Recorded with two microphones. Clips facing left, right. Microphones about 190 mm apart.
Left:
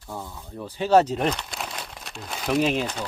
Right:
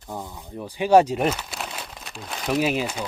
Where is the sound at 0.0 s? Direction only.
15° right (ahead or behind).